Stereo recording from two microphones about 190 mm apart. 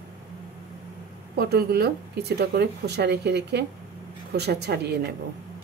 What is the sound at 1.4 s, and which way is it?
Speech, 60° right (ahead or behind).